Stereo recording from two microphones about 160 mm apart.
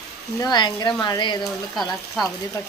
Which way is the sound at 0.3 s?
25° left (ahead or behind).